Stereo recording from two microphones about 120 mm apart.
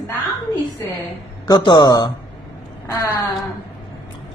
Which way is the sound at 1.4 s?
35° left (ahead or behind).